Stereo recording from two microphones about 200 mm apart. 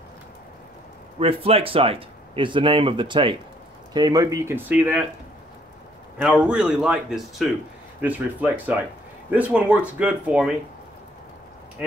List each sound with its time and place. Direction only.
1.2 s speech: 30° right (ahead or behind); by 5.0 s 10° right (ahead or behind)
6.4 s speech: 5° right (ahead or behind)